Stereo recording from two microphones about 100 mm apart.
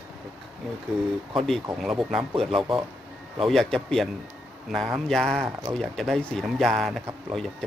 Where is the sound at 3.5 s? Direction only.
5° left (ahead or behind).